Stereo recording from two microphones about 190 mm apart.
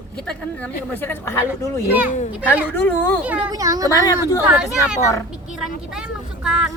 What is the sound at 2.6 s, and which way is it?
Speech, 10° left (ahead or behind).